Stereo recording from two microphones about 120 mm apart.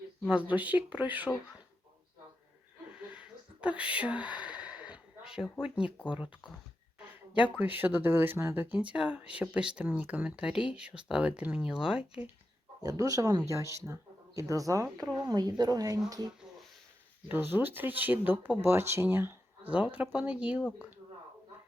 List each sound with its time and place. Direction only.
0.3 s speech: 10° right (ahead or behind)
3.0 s whispering: 10° right (ahead or behind)
4.4 s a sound: 10° right (ahead or behind)
5.6 s speech: 5° right (ahead or behind)
7.6 s speech: 15° right (ahead or behind)
12.8 s a woman's voice: 30° right (ahead or behind)
17.2 s speech: 15° right (ahead or behind)